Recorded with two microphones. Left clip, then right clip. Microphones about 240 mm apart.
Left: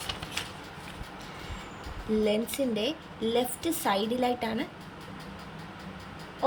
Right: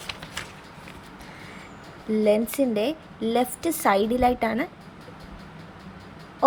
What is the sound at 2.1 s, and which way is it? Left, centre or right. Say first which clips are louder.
Speech: right 6 dB; centre.